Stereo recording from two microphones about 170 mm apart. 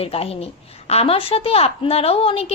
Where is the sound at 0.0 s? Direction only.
35° left (ahead or behind).